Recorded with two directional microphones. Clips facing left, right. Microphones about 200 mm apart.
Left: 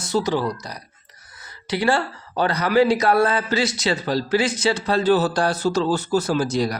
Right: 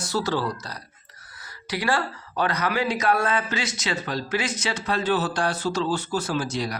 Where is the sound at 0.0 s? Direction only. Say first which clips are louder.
Left 4 dB; 20° left (ahead or behind).